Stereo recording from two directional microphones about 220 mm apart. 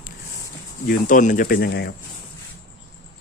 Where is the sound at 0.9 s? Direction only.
35° left (ahead or behind).